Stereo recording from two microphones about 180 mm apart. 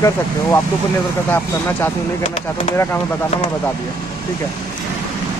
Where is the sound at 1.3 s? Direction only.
10° left (ahead or behind).